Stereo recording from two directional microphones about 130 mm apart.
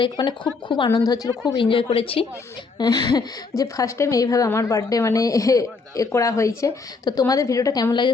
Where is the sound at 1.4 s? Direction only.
40° left (ahead or behind).